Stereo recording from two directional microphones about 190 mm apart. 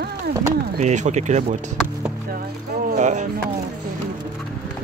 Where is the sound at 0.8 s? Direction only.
40° right (ahead or behind).